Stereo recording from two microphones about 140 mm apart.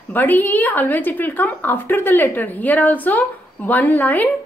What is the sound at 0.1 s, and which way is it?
A woman's voice, 15° left (ahead or behind).